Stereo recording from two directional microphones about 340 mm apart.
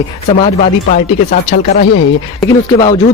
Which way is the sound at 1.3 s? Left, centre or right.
Centre.